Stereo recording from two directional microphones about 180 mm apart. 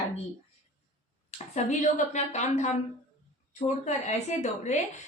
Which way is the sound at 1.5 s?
40° left (ahead or behind).